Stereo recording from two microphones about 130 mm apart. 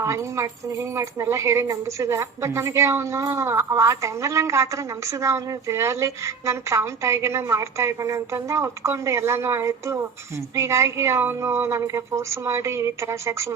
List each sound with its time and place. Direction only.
0.0 s speech: 20° right (ahead or behind)